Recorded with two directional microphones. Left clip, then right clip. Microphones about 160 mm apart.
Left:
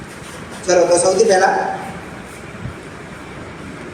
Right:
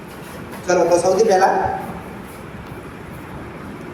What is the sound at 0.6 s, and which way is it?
Music, 45° right (ahead or behind).